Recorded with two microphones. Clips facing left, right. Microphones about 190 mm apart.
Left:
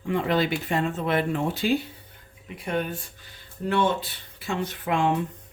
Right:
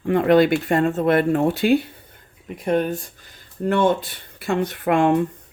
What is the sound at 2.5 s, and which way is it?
Speech, 45° right (ahead or behind).